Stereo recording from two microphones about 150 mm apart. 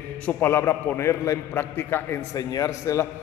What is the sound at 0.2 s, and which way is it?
A man's voice, 15° left (ahead or behind).